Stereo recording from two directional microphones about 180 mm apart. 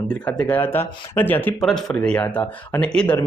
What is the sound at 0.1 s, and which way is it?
Speech, 5° left (ahead or behind).